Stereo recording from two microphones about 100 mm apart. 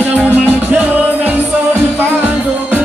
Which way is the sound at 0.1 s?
15° right (ahead or behind).